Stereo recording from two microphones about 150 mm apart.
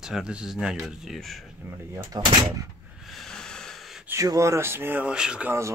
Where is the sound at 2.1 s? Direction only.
25° right (ahead or behind).